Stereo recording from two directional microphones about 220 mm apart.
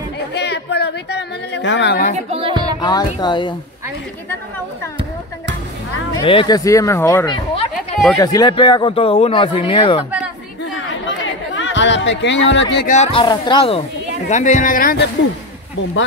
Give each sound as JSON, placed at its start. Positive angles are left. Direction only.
{"t": 0.3, "sound": "a sound", "side_deg": 50}
{"t": 2.1, "sound": "music", "side_deg": -25}
{"t": 2.8, "sound": "speech", "side_deg": 20}
{"t": 6.1, "sound": "speech", "side_deg": 20}
{"t": 7.7, "sound": "a sound", "side_deg": 0}
{"t": 8.2, "sound": "speech", "side_deg": 15}
{"t": 11.1, "sound": "chatter", "side_deg": 60}
{"t": 12.7, "sound": "speech", "side_deg": 35}